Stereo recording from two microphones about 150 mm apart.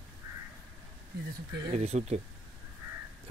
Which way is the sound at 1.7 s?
45° right (ahead or behind).